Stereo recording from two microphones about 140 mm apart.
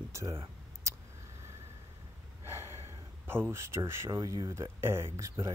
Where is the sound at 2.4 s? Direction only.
15° right (ahead or behind).